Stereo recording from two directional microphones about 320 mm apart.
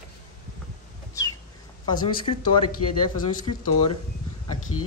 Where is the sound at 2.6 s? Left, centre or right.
Left.